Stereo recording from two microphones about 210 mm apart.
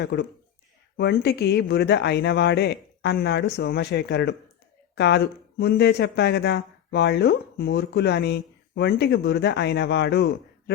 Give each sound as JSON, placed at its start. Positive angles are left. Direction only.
{"t": 0.0, "sound": "speech", "side_deg": 50}